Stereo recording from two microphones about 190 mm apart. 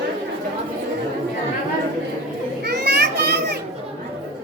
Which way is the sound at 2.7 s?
55° right (ahead or behind).